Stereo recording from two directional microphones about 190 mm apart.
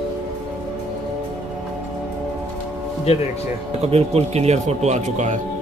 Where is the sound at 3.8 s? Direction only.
35° right (ahead or behind).